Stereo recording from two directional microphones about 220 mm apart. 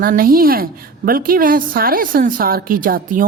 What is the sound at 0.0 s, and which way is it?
A woman's voice, 40° right (ahead or behind).